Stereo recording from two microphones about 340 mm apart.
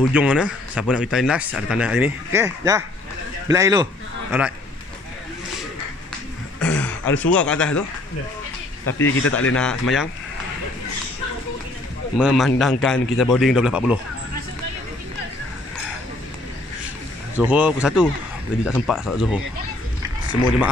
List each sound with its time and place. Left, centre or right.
0.1 s a man's voice: centre
6.6 s a sound: centre
7.3 s speech: centre
8.9 s speech: left
9.6 s speech: centre
12.2 s speech: centre
17.4 s speech: centre